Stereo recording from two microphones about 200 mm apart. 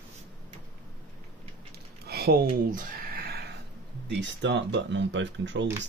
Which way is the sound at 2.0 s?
50° right (ahead or behind).